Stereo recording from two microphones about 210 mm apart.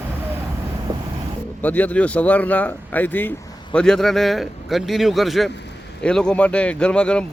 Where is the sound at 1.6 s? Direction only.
5° left (ahead or behind).